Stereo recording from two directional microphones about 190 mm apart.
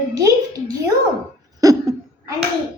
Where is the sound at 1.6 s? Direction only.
20° right (ahead or behind).